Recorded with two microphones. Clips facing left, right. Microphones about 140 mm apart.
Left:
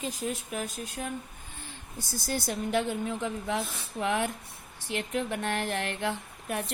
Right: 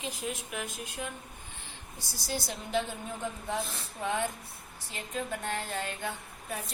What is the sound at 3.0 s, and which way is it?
Speech, 90° left.